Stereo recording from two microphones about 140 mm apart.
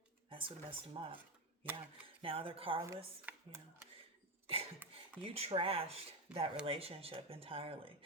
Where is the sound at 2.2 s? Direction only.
40° right (ahead or behind).